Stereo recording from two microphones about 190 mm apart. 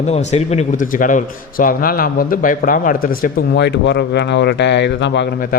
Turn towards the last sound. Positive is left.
turn(degrees=65)  # may be behind; listen again after turning